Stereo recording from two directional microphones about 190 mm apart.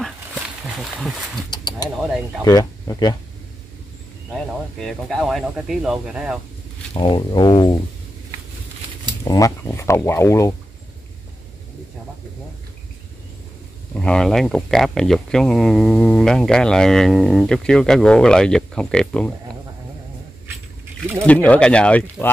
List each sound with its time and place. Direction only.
0.3 s wild animals: 5° right (ahead or behind)
1.5 s speech: 20° left (ahead or behind)
4.3 s speech: centre (ahead or behind)
6.9 s speech: 25° left (ahead or behind)
9.2 s speech: 20° left (ahead or behind)
13.9 s speech: 5° left (ahead or behind)
21.3 s speech: 5° left (ahead or behind)